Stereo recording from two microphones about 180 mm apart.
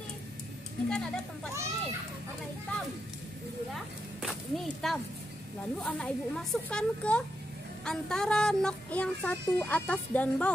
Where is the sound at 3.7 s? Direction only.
Centre (ahead or behind).